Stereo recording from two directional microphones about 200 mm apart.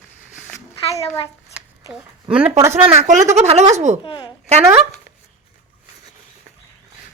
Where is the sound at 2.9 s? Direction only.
30° right (ahead or behind).